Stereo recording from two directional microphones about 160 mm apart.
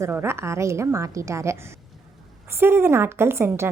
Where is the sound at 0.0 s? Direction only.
15° right (ahead or behind).